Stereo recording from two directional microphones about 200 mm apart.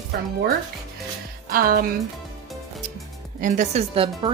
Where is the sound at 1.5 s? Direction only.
45° right (ahead or behind).